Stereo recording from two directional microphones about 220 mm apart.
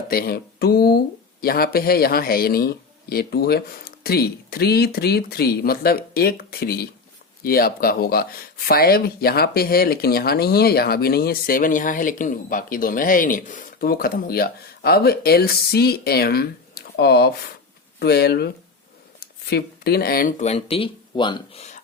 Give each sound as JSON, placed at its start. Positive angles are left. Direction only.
{"t": 0.1, "sound": "speech", "side_deg": 45}